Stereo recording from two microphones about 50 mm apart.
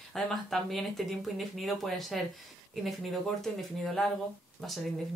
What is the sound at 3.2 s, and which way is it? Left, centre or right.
A woman's voice, centre.